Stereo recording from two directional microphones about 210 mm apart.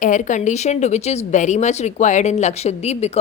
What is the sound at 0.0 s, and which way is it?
Speech, 35° left (ahead or behind).